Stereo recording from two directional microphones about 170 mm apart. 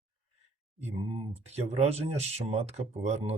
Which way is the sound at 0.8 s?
40° right (ahead or behind).